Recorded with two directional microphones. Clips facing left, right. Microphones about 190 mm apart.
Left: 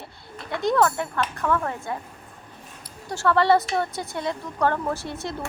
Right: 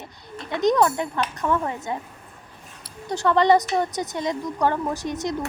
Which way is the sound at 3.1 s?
20° right (ahead or behind).